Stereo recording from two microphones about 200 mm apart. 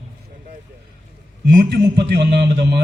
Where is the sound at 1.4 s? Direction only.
55° right (ahead or behind).